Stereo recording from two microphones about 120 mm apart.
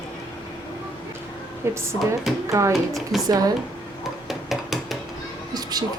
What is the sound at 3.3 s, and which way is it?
Speech, 30° right (ahead or behind).